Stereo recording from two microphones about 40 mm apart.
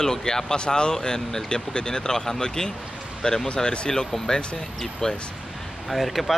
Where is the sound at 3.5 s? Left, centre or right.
Left.